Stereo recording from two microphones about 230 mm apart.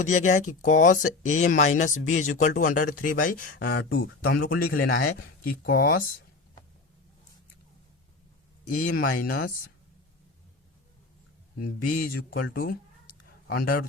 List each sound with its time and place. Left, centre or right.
0.0 s speech: left
3.6 s speech: left
3.9 s speech: left
8.7 s speech: left
11.5 s speech: left
13.2 s a sound: left